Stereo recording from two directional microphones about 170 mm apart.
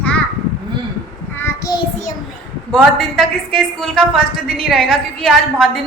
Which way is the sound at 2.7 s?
5° left (ahead or behind).